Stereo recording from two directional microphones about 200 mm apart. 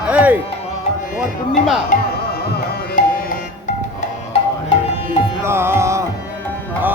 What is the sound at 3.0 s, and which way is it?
Music, 40° left (ahead or behind).